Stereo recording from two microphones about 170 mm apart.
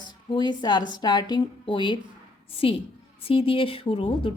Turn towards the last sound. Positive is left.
turn(degrees=30)  # may be behind; listen again after turning